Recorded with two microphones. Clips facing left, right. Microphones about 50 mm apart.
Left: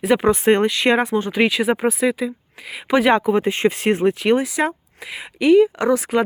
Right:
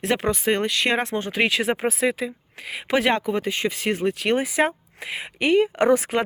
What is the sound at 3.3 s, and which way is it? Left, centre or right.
Speech, left.